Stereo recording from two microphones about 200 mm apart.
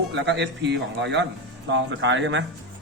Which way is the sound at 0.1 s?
60° right (ahead or behind).